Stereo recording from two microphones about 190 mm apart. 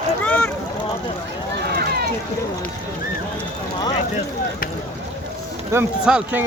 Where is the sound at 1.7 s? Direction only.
55° right (ahead or behind).